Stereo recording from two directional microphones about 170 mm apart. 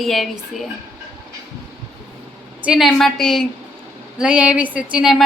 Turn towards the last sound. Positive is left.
turn(degrees=-5)  # may be behind; listen again after turning